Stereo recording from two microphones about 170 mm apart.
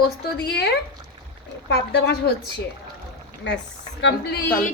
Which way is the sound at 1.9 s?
75° left (ahead or behind).